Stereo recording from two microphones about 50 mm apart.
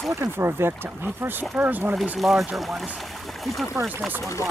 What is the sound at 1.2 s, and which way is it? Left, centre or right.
Speech, right.